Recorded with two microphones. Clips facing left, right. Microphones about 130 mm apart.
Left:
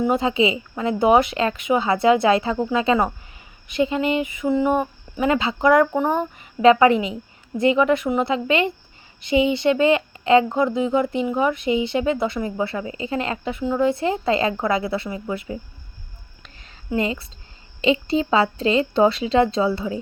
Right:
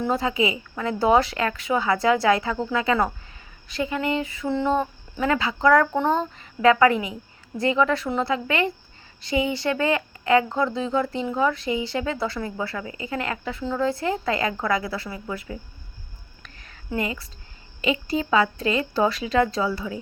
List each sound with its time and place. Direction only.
0.0 s speech: 20° left (ahead or behind)
16.4 s a sound: 20° left (ahead or behind)
17.7 s speech: 25° left (ahead or behind)